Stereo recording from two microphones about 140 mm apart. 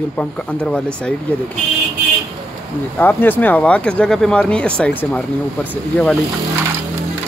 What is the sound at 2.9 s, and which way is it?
Speech, 15° left (ahead or behind).